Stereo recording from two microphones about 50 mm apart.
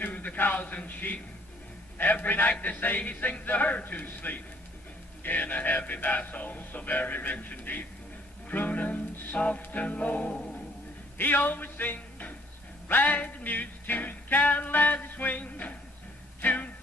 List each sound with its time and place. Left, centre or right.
0.0 s a man's voice: left
2.0 s music: left
11.1 s speech: left
12.8 s music: left